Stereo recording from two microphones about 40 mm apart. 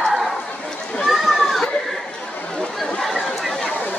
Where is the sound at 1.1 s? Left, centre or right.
Centre.